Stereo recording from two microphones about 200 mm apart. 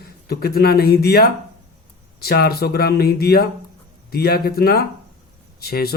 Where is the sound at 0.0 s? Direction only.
50° left (ahead or behind).